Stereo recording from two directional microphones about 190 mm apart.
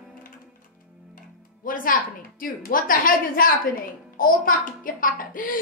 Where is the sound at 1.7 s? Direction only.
45° left (ahead or behind).